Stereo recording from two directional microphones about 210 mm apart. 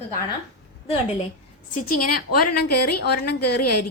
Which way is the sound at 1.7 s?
40° left (ahead or behind).